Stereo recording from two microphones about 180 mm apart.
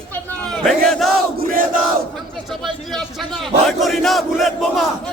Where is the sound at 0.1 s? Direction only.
5° left (ahead or behind).